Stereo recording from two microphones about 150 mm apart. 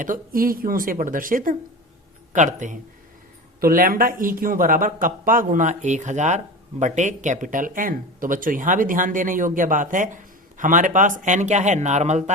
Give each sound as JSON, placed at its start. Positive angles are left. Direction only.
{"t": 0.0, "sound": "speech", "side_deg": -70}
{"t": 3.6, "sound": "speech", "side_deg": -70}